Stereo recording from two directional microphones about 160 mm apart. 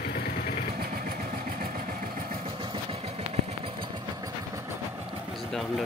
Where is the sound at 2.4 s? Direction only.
30° right (ahead or behind).